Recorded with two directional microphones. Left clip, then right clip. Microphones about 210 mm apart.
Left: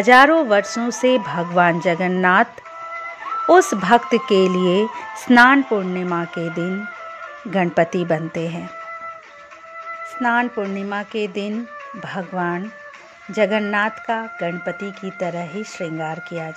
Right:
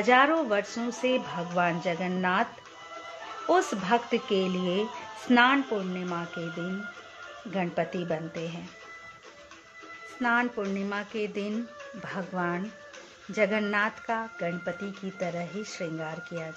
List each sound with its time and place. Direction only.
0.0 s speech: 40° left (ahead or behind)
3.4 s speech: 40° left (ahead or behind)
10.2 s speech: 30° left (ahead or behind)